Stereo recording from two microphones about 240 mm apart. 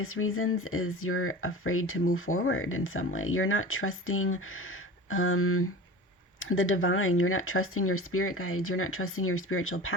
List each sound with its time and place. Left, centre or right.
0.0 s speech: left